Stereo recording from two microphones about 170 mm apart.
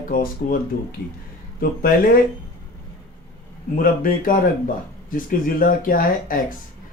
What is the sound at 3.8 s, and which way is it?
Speech, 55° left (ahead or behind).